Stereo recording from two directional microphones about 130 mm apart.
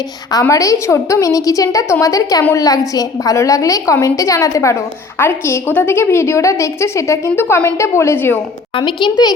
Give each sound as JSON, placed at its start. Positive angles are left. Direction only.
{"t": 0.3, "sound": "a woman's voice", "side_deg": 25}
{"t": 8.8, "sound": "a child's voice", "side_deg": 35}